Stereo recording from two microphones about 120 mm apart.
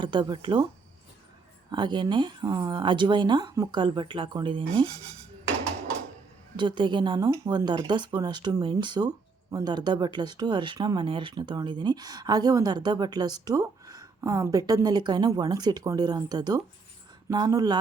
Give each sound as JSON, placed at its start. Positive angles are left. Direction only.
{"t": 0.0, "sound": "speech", "side_deg": -40}
{"t": 1.7, "sound": "speech", "side_deg": -40}
{"t": 6.6, "sound": "speech", "side_deg": -40}